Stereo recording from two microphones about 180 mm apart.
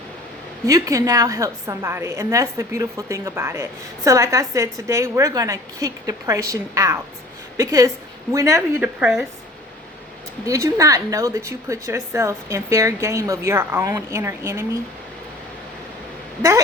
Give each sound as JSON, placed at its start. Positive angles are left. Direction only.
{"t": 0.6, "sound": "a woman's voice", "side_deg": -20}
{"t": 10.4, "sound": "a woman's voice", "side_deg": -20}